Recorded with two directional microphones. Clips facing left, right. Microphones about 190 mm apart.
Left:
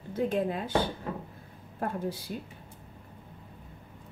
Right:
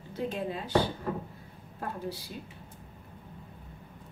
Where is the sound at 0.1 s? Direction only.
50° left (ahead or behind).